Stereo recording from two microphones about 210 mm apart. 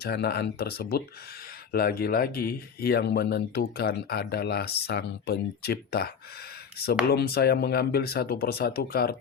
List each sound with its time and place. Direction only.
0.0 s speech: 50° left (ahead or behind)
7.1 s speech: 50° left (ahead or behind)